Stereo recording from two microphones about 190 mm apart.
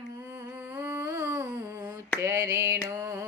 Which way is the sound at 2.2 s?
15° right (ahead or behind).